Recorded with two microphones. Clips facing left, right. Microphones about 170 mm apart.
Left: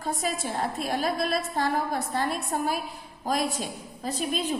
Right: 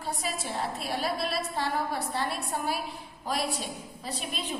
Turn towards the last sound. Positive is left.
turn(degrees=45)  # may be behind; listen again after turning